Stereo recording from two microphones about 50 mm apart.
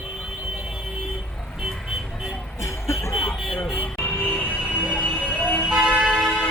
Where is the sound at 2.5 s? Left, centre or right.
Left.